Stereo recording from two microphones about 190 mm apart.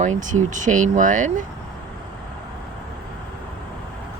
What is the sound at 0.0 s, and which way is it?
Speech, 40° right (ahead or behind).